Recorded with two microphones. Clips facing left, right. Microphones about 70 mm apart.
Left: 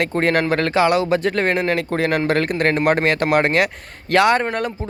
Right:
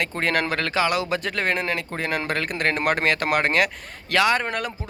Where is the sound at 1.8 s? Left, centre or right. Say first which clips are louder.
Left 8 dB; left.